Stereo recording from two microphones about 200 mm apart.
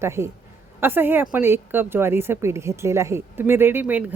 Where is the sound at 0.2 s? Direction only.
15° right (ahead or behind).